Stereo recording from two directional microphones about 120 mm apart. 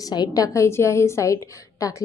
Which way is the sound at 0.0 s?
35° left (ahead or behind).